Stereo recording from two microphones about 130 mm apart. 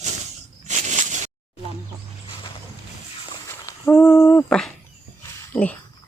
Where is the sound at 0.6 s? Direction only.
65° right (ahead or behind).